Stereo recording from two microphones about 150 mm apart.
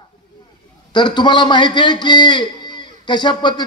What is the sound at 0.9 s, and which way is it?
A man's voice, 30° left (ahead or behind).